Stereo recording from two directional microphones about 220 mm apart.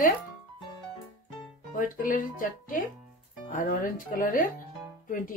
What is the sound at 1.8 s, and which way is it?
Speech, 40° left (ahead or behind).